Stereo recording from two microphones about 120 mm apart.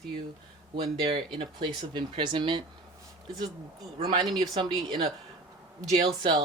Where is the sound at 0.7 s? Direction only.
55° right (ahead or behind).